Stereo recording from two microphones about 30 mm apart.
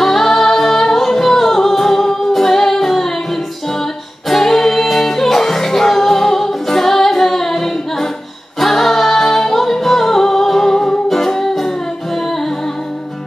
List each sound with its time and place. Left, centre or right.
0.0 s singing: centre
4.3 s music: centre
8.5 s singing: centre
10.6 s music: centre